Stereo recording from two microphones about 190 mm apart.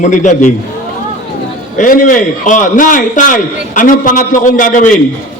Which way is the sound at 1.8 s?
45° left (ahead or behind).